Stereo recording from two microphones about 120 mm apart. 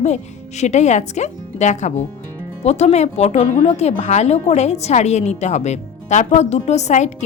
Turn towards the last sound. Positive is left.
turn(degrees=70)  # may be behind; listen again after turning